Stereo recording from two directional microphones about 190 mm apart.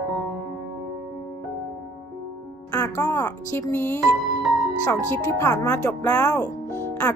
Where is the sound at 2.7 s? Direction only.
15° left (ahead or behind).